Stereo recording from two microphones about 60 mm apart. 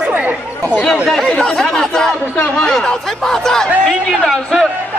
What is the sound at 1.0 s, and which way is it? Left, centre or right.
Speech, centre.